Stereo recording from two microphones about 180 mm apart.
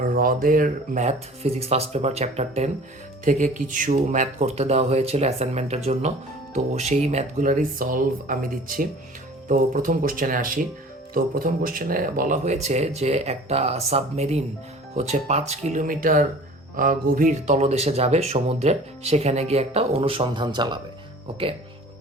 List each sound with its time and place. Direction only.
0.0 s speech: 50° right (ahead or behind); by 20.7 s 25° right (ahead or behind)